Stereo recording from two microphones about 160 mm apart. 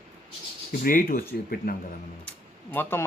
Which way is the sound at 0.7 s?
60° left (ahead or behind).